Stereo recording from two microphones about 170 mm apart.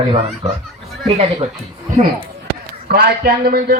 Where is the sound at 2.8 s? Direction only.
65° right (ahead or behind).